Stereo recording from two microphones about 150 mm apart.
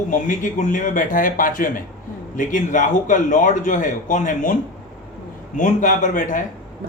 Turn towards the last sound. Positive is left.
turn(degrees=60)  # may be behind; listen again after turning